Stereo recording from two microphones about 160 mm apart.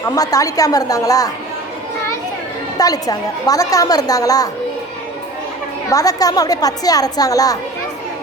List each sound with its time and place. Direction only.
0.2 s a woman's voice: 20° left (ahead or behind)
2.7 s a woman's voice: 25° left (ahead or behind)
5.9 s a woman's voice: 20° left (ahead or behind)